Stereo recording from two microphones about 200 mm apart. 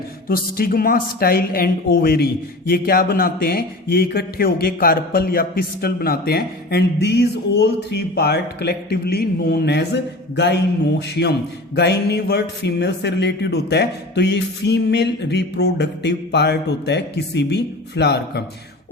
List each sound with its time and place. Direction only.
0.3 s speech: 45° left (ahead or behind)